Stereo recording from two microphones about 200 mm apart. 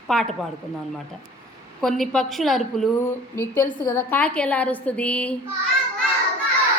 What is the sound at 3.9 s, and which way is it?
A woman's voice, 10° left (ahead or behind).